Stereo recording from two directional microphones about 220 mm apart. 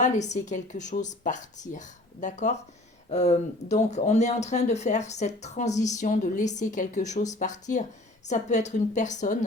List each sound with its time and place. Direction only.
0.0 s speech: 30° left (ahead or behind)